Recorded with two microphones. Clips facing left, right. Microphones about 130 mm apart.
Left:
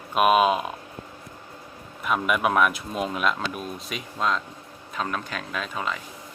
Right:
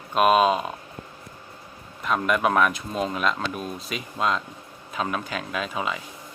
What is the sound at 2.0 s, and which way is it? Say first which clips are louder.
Speech: right 1 dB; 5° left (ahead or behind).